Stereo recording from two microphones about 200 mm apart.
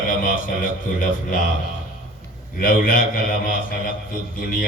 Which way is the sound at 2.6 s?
45° left (ahead or behind).